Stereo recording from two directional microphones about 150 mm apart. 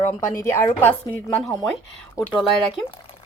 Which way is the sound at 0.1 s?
15° left (ahead or behind).